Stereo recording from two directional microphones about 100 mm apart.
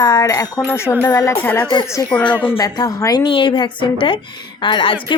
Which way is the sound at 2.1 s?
10° left (ahead or behind).